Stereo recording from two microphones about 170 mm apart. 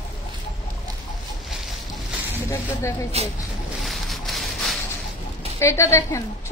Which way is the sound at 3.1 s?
40° right (ahead or behind).